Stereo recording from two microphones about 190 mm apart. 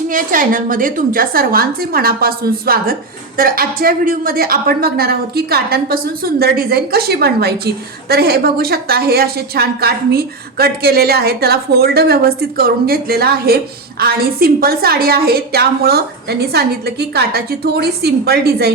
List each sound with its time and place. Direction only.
0.1 s a woman's voice: 45° right (ahead or behind)